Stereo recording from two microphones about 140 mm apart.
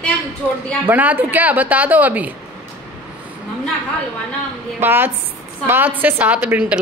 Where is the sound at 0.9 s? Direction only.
10° right (ahead or behind).